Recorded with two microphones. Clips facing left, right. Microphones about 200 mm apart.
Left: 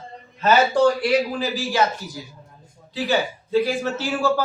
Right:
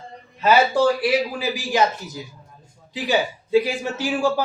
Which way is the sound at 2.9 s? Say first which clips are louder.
Even; 15° right (ahead or behind).